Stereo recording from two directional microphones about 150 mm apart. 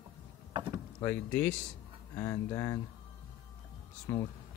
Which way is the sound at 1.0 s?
15° left (ahead or behind).